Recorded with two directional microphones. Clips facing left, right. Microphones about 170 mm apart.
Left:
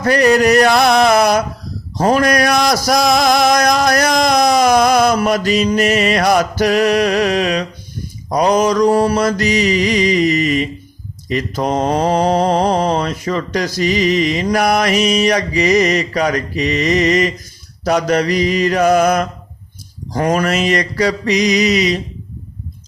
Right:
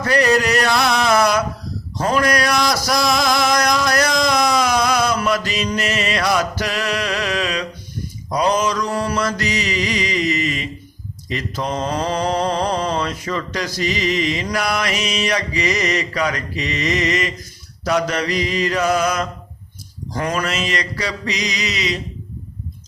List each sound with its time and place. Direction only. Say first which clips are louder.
0.0 s a sound: left 5 dB; 45° left (ahead or behind)
5.7 s mantra: left 7 dB; 50° left (ahead or behind); by 9.1 s 35° left (ahead or behind)
9.1 s mantra: left 6 dB; 50° left (ahead or behind)
20.1 s mantra: left 6 dB; 40° left (ahead or behind)
20.4 s mantra: left 7 dB; 55° left (ahead or behind)